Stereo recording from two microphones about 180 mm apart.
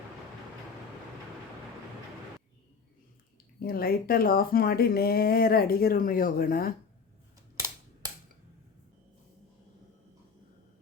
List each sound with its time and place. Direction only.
3.6 s speech: 55° left (ahead or behind)
7.5 s typewriter: 15° right (ahead or behind)